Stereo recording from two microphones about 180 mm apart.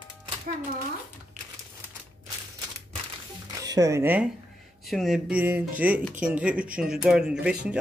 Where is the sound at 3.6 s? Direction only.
20° right (ahead or behind).